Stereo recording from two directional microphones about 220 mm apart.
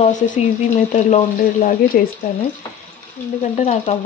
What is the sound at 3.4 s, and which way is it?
Speech, 30° left (ahead or behind).